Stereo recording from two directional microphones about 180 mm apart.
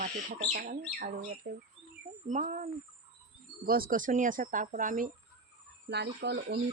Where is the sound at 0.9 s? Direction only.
45° right (ahead or behind).